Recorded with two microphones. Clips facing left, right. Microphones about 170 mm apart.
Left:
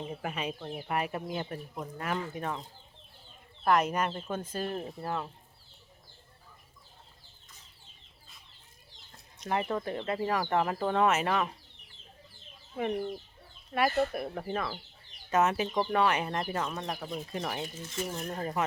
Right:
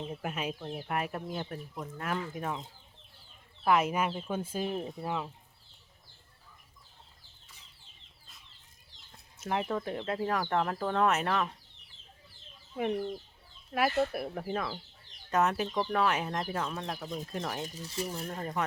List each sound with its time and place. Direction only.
0.0 s speech: centre (ahead or behind)
9.1 s speech: centre (ahead or behind)
12.9 s speech: 10° left (ahead or behind)
13.7 s speech: 5° right (ahead or behind)
17.7 s speech: 35° right (ahead or behind)
18.3 s speech: 5° left (ahead or behind)